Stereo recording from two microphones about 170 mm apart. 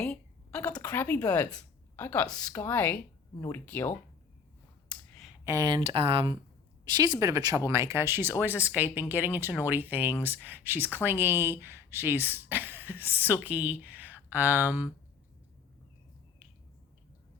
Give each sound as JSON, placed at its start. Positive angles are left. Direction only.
{"t": 0.0, "sound": "speech", "side_deg": 5}
{"t": 5.5, "sound": "speech", "side_deg": -25}